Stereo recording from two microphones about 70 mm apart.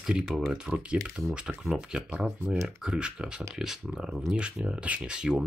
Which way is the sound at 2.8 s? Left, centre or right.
Centre.